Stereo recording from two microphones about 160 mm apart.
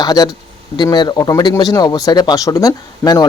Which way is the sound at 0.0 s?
25° left (ahead or behind).